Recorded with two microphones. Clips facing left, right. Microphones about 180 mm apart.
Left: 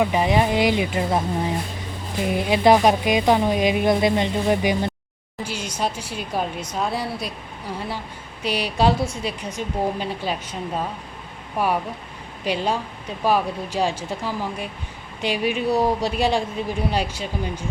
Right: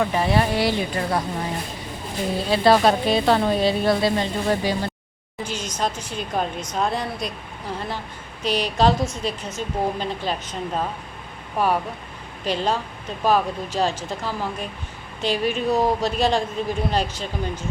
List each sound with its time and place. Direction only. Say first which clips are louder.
0.0 s a woman's voice: left 1 dB; 15° left (ahead or behind)
2.2 s a woman's voice: left 1 dB; 15° left (ahead or behind)
8.4 s a woman's voice: right 1 dB; 10° left (ahead or behind)